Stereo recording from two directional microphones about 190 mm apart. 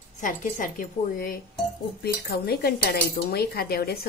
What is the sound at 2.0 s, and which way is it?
Speech, 55° left (ahead or behind).